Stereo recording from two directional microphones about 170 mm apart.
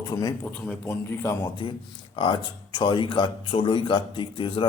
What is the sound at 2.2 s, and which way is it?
Speech, 25° left (ahead or behind).